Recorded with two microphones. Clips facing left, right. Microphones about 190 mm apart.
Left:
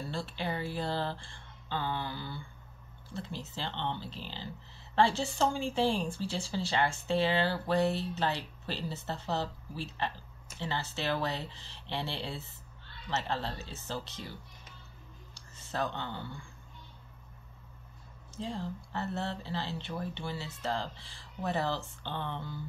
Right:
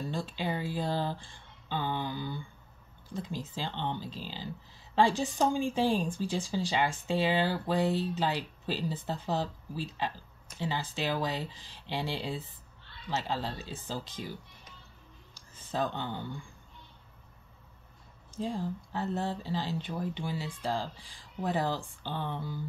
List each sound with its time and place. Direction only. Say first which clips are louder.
0.0 s a woman's voice: right 2 dB; 15° right (ahead or behind)
15.6 s a woman's voice: right 2 dB; 15° right (ahead or behind)
18.3 s a woman's voice: right 4 dB; 15° right (ahead or behind)